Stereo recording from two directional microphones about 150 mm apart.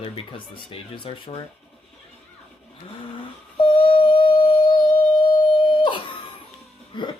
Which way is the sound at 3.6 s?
35° left (ahead or behind).